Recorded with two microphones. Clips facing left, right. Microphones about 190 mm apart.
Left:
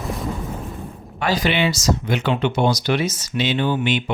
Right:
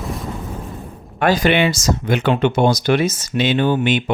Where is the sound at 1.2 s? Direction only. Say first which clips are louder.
Right 5 dB; 50° right (ahead or behind).